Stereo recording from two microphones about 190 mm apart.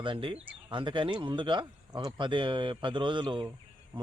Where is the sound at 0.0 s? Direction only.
25° right (ahead or behind).